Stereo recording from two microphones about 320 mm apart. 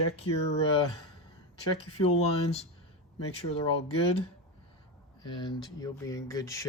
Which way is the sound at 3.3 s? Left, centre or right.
Centre.